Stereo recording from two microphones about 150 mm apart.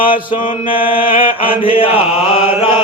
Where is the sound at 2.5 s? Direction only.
35° left (ahead or behind).